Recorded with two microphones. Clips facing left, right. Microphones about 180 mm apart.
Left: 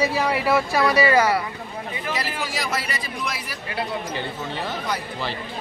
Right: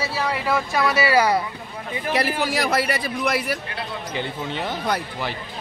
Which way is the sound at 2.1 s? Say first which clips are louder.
Right 7 dB; 60° right (ahead or behind).